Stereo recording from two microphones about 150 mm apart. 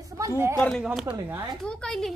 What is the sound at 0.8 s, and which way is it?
A woman's voice, 5° right (ahead or behind).